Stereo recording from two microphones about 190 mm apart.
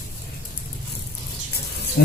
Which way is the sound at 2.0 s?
60° left (ahead or behind).